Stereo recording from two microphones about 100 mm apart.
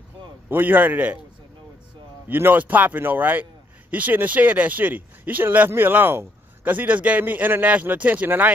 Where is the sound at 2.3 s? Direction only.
20° right (ahead or behind).